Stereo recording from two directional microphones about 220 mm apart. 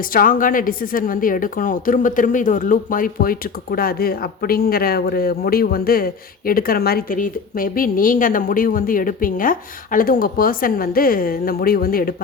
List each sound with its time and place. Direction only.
0.0 s a woman's voice: 40° left (ahead or behind)